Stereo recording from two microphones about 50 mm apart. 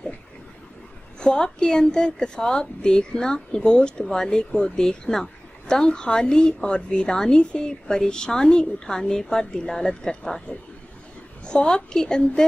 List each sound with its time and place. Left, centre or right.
1.2 s a woman's voice: centre
11.4 s a woman's voice: centre